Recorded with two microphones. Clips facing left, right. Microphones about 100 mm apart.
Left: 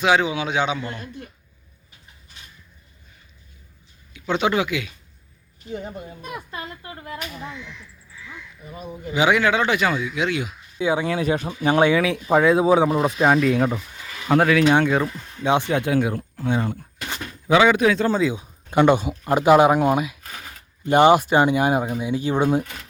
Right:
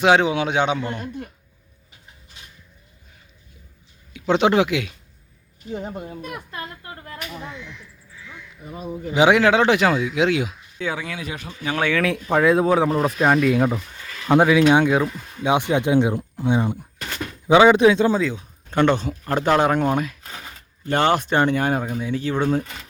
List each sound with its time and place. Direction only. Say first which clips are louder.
0.0 s a man's voice: right 3 dB; 65° right (ahead or behind)
4.1 s speech: right 4 dB; 75° right (ahead or behind)
6.6 s speech: even; 15° left (ahead or behind)
9.3 s speech: right 3 dB; 90° right
10.8 s speech: left 6 dB; 15° left (ahead or behind)
11.0 s speech: left 9 dB; 35° left (ahead or behind)
12.2 s speech: even; 5° left (ahead or behind)
14.3 s speech: right 2 dB; 15° right (ahead or behind)
18.3 s speech: left 2 dB; 10° left (ahead or behind)